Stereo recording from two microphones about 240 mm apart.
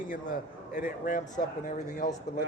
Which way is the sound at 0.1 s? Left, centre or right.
Left.